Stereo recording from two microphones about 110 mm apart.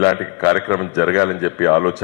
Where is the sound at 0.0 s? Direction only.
25° left (ahead or behind).